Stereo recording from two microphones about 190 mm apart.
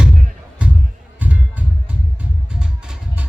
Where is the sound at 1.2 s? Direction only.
10° right (ahead or behind).